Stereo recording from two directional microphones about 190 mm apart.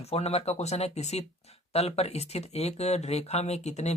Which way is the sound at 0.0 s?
35° left (ahead or behind).